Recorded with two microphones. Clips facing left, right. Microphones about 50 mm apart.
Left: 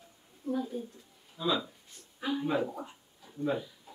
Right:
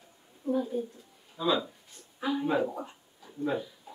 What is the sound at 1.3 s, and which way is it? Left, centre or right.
Speech, centre.